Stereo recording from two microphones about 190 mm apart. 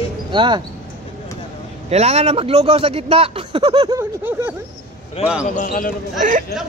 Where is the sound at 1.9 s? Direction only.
35° right (ahead or behind).